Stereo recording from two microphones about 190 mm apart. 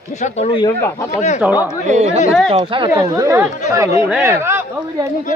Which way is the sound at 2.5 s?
30° right (ahead or behind).